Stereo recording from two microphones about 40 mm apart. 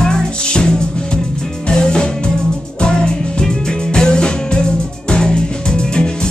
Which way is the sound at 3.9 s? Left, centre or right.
Centre.